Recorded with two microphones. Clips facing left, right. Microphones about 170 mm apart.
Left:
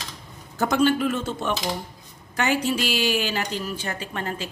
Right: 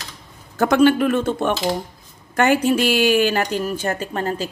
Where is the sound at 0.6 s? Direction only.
65° right (ahead or behind); by 4.5 s 40° right (ahead or behind).